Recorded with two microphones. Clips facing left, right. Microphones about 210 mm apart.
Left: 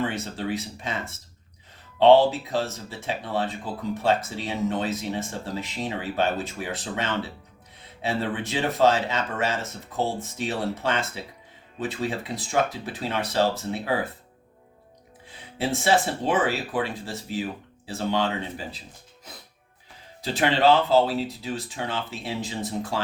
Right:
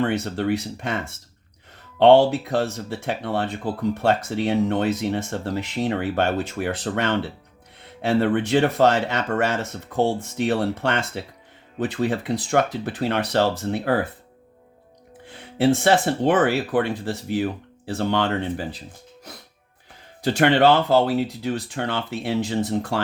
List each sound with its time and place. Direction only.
0.0 s speech: 60° right (ahead or behind)
2.0 s speech: 65° right (ahead or behind)
11.8 s speech: 55° right (ahead or behind)
15.3 s speech: 60° right (ahead or behind)
20.2 s speech: 60° right (ahead or behind)